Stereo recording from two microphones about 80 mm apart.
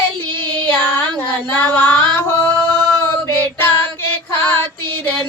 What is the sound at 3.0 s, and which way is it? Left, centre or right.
Female singing, left.